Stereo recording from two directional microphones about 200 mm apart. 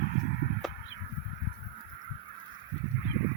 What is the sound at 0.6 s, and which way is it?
Crow, centre (ahead or behind).